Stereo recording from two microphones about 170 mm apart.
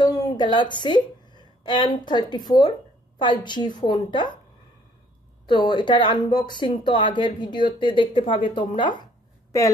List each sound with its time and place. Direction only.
0.0 s a woman's voice: 25° left (ahead or behind)
5.5 s speech: 25° left (ahead or behind)